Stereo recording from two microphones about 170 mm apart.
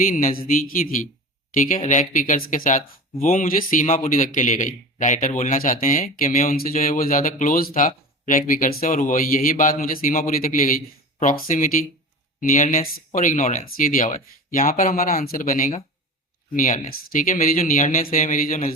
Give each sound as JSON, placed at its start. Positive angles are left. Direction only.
{"t": 0.1, "sound": "a man's voice", "side_deg": 50}